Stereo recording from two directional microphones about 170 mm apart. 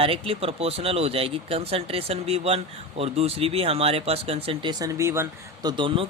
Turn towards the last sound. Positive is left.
turn(degrees=-30)  # may be behind; listen again after turning